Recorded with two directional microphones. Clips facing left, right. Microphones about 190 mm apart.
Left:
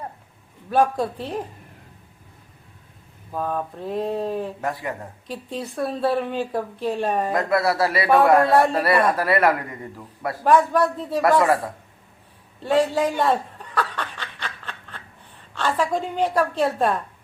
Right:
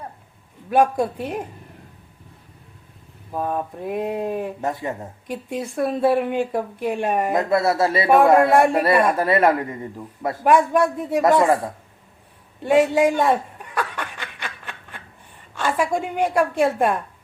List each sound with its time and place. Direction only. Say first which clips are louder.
0.7 s speech: right 2 dB; 10° right (ahead or behind)
3.3 s speech: right 1 dB; 15° right (ahead or behind)
4.6 s speech: right 2 dB; 25° right (ahead or behind)
5.5 s speech: right 3 dB; 10° right (ahead or behind)
7.3 s speech: right 2 dB; 25° right (ahead or behind)
8.4 s speech: right 2 dB; 10° right (ahead or behind)
8.7 s speech: right 2 dB; 20° right (ahead or behind)
10.4 s speech: right 1 dB; 10° right (ahead or behind)
12.6 s chuckle: right 4 dB; 10° right (ahead or behind)
15.5 s speech: right 1 dB; 10° right (ahead or behind)